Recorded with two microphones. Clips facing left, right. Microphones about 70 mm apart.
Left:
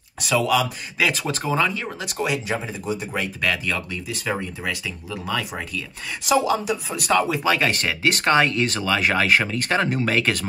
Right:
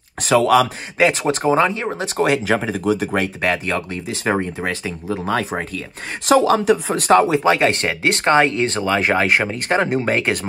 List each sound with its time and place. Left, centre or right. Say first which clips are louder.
0.2 s speech: right 6 dB; right
1.0 s speech: right 7 dB; right
2.4 s speech: right 8 dB; right
3.4 s speech: right 4 dB; right
6.2 s speech: right 6 dB; right
7.2 s speech: right 5 dB; right